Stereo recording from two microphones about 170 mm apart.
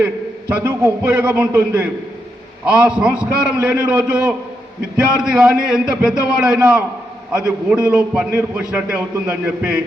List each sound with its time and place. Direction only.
0.5 s a man's voice: 10° right (ahead or behind)